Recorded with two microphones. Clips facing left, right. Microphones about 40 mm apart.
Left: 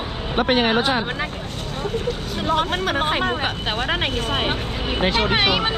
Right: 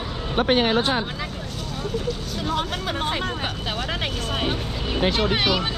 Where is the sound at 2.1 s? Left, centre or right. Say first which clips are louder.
Left 4 dB; left.